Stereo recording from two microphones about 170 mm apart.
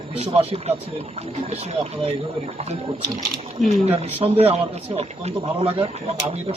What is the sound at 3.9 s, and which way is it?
Speech, 35° right (ahead or behind).